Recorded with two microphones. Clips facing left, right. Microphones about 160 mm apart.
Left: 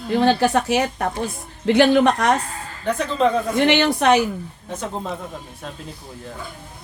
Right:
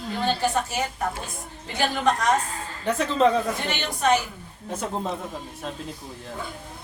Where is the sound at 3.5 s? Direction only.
75° left (ahead or behind).